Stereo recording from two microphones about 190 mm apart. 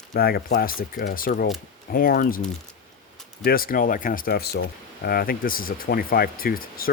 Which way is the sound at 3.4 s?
50° left (ahead or behind).